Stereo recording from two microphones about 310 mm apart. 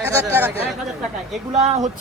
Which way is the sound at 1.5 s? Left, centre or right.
Right.